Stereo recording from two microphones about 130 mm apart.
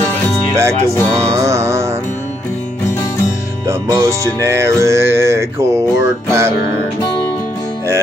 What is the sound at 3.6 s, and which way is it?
Music, 20° right (ahead or behind).